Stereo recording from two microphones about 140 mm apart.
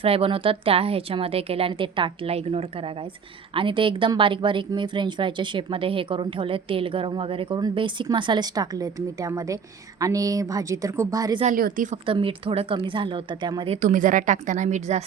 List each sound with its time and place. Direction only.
0.0 s a woman's voice: 40° right (ahead or behind); by 11.3 s 25° right (ahead or behind)
11.4 s speech: 80° right
12.0 s a woman's voice: 40° right (ahead or behind)
13.7 s speech: 65° right (ahead or behind)